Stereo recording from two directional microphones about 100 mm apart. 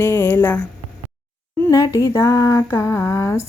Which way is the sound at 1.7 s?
35° left (ahead or behind).